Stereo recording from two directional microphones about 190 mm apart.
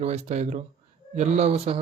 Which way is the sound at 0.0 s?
35° right (ahead or behind).